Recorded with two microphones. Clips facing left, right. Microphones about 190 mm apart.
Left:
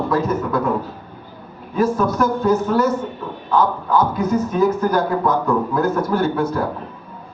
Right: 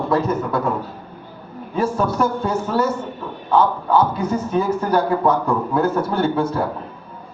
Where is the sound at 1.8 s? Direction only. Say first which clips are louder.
Left 2 dB; 30° right (ahead or behind).